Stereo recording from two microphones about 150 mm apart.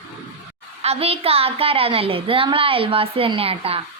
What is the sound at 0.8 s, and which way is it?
Speech, 40° right (ahead or behind).